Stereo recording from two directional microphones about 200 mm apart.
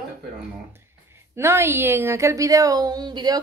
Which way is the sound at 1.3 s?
10° right (ahead or behind).